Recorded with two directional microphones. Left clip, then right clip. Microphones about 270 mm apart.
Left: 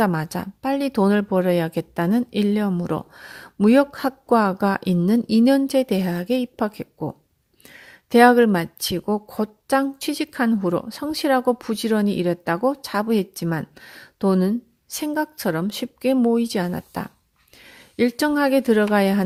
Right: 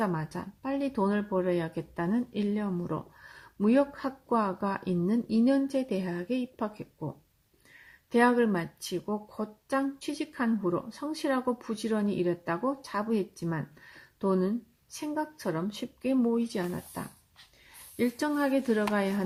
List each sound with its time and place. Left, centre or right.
0.0 s speech: left